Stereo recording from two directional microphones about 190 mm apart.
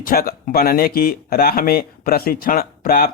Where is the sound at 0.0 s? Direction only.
50° left (ahead or behind).